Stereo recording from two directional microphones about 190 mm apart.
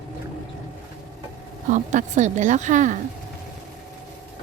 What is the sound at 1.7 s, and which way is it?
Speech, 40° right (ahead or behind).